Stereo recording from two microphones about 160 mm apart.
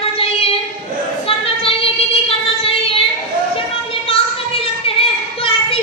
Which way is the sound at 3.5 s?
35° left (ahead or behind).